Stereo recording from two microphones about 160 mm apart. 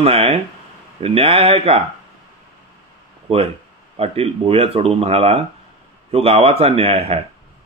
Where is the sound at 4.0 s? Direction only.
40° right (ahead or behind).